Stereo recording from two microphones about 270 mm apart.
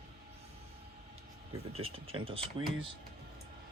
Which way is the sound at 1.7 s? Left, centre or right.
Right.